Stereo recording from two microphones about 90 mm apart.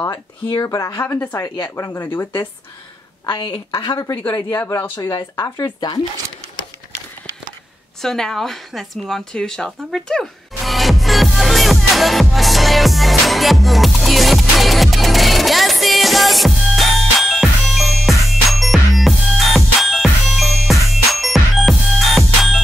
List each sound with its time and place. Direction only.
0.5 s a woman's voice: 55° left (ahead or behind)
0.7 s speech: 35° left (ahead or behind)
1.0 s speech: 20° left (ahead or behind)
1.8 s speech: 30° left (ahead or behind)
3.3 s a woman's voice: 65° left (ahead or behind)
4.6 s speech: 25° left (ahead or behind)
8.0 s speech: 5° left (ahead or behind)
9.7 s music: 5° left (ahead or behind)